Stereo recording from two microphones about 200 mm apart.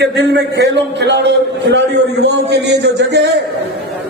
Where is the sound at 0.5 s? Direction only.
60° right (ahead or behind).